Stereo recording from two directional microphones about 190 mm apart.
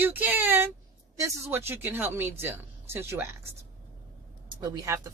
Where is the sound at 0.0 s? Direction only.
10° right (ahead or behind).